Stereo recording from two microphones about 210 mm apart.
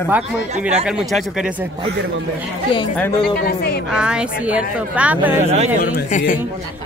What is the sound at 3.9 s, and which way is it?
Speech, 5° right (ahead or behind).